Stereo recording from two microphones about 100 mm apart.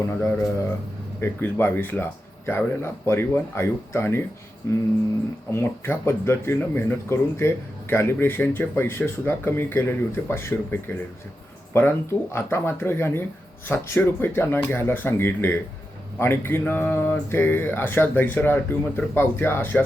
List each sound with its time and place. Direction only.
0.1 s speech: 25° left (ahead or behind)